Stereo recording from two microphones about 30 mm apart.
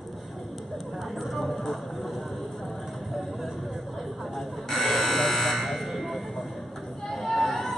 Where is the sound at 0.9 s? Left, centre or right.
Centre.